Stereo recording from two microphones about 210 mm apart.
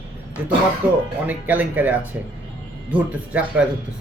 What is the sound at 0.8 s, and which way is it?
A man's voice, 5° right (ahead or behind).